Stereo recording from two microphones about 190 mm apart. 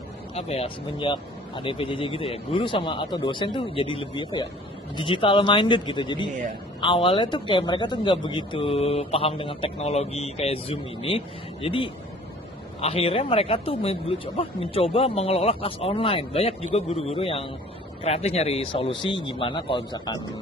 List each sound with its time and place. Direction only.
0.3 s speech: 35° left (ahead or behind)